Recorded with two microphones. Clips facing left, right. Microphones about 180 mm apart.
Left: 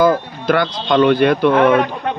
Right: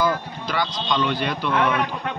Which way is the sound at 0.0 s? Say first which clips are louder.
Left 9 dB; 55° left (ahead or behind).